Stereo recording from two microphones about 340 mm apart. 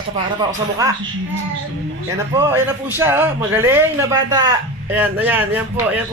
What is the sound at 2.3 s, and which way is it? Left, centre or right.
A man's voice, centre.